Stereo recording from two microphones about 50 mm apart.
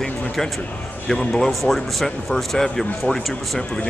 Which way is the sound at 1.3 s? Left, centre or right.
Centre.